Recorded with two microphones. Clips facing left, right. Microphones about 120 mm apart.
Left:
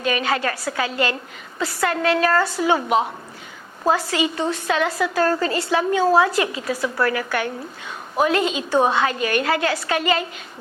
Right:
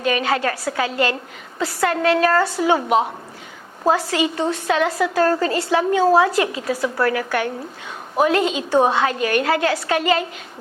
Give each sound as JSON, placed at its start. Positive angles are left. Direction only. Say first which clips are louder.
{"t": 0.0, "sound": "a woman's voice", "louder": "right 2 dB", "side_deg": -50}
{"t": 3.8, "sound": "a woman's voice", "louder": "right 2 dB", "side_deg": -35}
{"t": 4.1, "sound": "a woman's voice", "louder": "right 2 dB", "side_deg": -45}